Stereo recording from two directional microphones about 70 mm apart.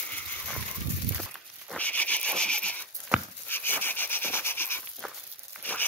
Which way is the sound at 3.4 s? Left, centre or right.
Left.